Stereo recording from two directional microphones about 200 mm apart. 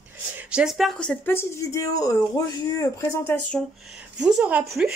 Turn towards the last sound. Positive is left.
turn(degrees=-5)  # may be behind; listen again after turning